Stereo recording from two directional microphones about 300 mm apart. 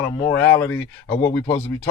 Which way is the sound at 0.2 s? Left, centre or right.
Centre.